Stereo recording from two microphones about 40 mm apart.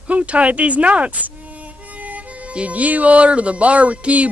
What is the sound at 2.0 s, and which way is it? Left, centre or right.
Harmonica, right.